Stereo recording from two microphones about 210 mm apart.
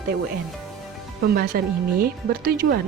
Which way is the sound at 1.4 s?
45° right (ahead or behind).